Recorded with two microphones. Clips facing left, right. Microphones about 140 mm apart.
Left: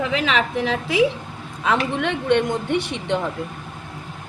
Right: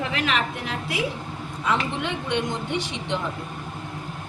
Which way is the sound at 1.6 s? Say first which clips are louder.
Left 4 dB; 75° left (ahead or behind).